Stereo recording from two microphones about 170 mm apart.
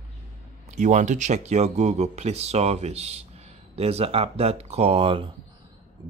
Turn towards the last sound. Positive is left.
turn(degrees=-35)  # may be behind; listen again after turning